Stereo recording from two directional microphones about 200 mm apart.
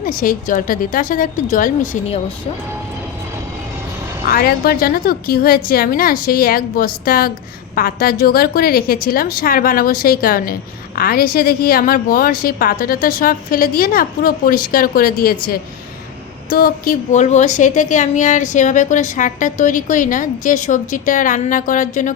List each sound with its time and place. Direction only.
0.0 s a woman's voice: 45° left (ahead or behind)
4.3 s a woman's voice: 50° left (ahead or behind)